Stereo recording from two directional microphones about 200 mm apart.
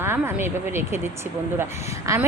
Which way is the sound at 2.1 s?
15° right (ahead or behind).